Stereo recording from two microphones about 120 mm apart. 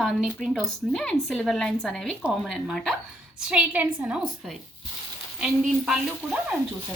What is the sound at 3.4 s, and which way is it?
A woman's voice, 10° right (ahead or behind).